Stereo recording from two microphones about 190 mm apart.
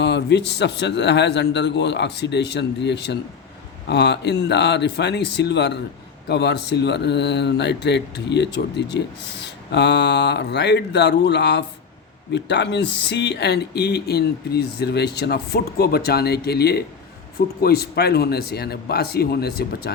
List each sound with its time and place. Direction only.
0.0 s speech: 65° left (ahead or behind)